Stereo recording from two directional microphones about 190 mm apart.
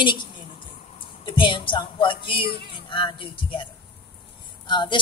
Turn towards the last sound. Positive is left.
turn(degrees=25)  # may be behind; listen again after turning